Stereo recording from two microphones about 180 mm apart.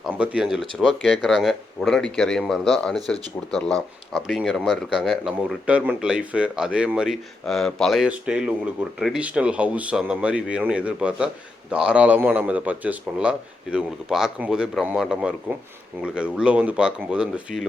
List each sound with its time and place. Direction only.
0.0 s speech: 5° right (ahead or behind)